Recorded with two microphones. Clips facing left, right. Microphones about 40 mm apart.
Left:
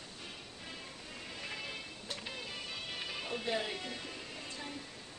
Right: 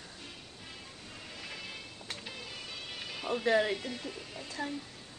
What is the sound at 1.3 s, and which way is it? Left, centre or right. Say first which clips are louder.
Music: left 1 dB; centre.